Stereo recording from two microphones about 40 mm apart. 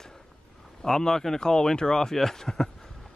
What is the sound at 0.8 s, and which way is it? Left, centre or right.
Speech, centre.